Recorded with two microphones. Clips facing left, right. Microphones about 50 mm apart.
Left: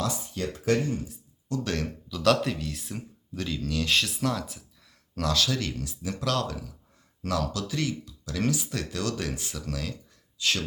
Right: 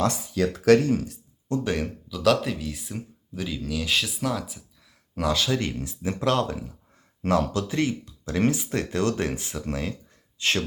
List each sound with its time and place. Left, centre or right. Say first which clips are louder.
0.6 s speech: right 8 dB; right
1.6 s speech: right 4 dB; centre
5.1 s speech: right 3 dB; centre; by 10.6 s right